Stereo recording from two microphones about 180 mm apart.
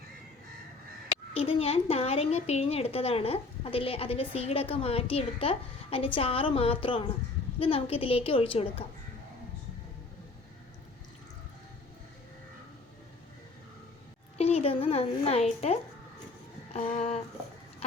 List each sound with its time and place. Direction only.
1.3 s a woman's voice: 30° left (ahead or behind)
14.3 s a woman's voice: 35° left (ahead or behind)
16.7 s a woman's voice: 35° left (ahead or behind)